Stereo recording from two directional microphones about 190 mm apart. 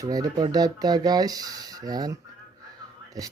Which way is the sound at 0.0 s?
20° right (ahead or behind).